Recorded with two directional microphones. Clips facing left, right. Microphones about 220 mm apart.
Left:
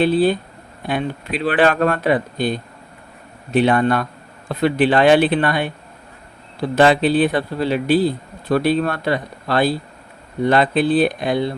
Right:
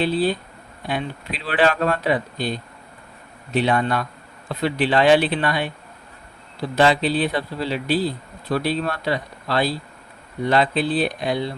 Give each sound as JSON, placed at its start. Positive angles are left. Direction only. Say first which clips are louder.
{"t": 0.0, "sound": "speech", "louder": "left 5 dB", "side_deg": 55}
{"t": 6.7, "sound": "speech", "louder": "left 4 dB", "side_deg": 55}